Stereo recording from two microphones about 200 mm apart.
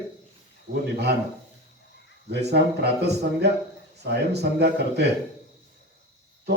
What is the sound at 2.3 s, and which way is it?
A man's voice, 55° right (ahead or behind).